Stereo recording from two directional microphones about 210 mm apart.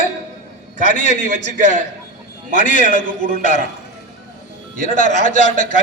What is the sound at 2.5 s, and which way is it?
A man's voice, 35° left (ahead or behind).